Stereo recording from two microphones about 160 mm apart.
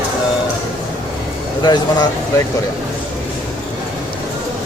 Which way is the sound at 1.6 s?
25° left (ahead or behind).